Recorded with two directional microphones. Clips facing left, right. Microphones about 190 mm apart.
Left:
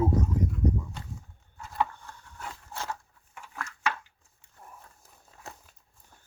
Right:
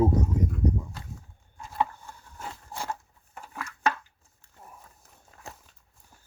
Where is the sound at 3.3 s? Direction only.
40° right (ahead or behind).